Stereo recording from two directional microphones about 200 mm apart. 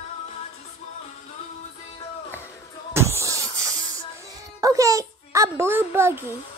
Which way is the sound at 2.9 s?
15° right (ahead or behind).